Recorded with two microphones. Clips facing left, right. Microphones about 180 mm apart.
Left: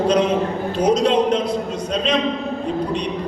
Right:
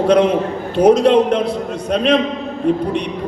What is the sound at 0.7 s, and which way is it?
Speech, 60° right (ahead or behind).